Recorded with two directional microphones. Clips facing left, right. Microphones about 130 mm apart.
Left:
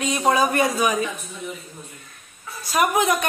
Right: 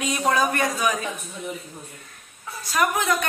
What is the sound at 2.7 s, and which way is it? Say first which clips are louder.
Speech: left 3 dB; 15° left (ahead or behind).